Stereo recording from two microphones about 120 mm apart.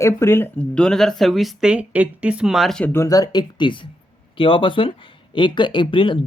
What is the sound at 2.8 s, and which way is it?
Speech, 20° left (ahead or behind).